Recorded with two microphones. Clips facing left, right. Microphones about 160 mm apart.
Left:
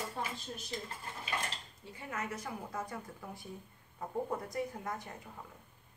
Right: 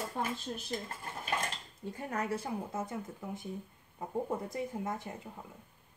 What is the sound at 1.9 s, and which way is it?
Speech, 45° right (ahead or behind).